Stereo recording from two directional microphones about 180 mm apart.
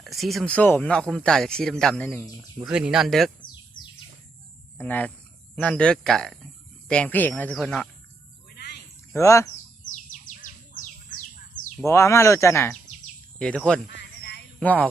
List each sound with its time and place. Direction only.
0.0 s speech: centre (ahead or behind)
2.6 s speech: 5° right (ahead or behind)
4.8 s speech: 10° left (ahead or behind)
8.5 s a sound: 65° left (ahead or behind)
9.1 s speech: 15° left (ahead or behind)
9.9 s bird: 45° left (ahead or behind)
11.9 s speech: 15° left (ahead or behind)
13.4 s speech: 5° left (ahead or behind)
13.9 s a sound: 70° left (ahead or behind)
14.6 s speech: 10° left (ahead or behind)